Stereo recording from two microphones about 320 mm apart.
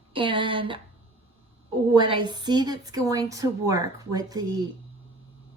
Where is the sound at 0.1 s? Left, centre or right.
Centre.